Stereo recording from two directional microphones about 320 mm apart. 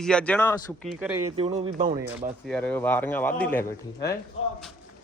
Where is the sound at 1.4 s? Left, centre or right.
Right.